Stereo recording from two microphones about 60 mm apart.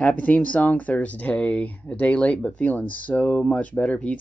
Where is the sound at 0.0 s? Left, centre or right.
Left.